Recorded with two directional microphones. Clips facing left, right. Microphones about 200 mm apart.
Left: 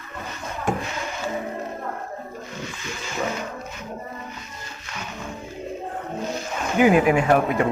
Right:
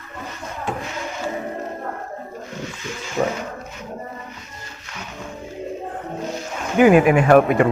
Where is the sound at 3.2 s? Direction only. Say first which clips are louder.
Right 6 dB; 45° right (ahead or behind).